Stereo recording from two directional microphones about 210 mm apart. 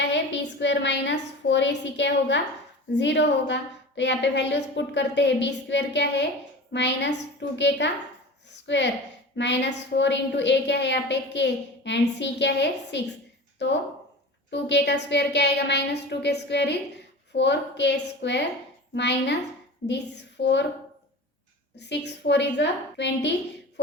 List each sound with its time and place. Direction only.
0.0 s a woman's voice: 55° left (ahead or behind)
21.8 s a woman's voice: 55° left (ahead or behind)